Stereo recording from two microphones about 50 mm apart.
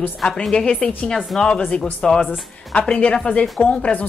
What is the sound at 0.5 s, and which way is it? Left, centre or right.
A woman's voice, centre.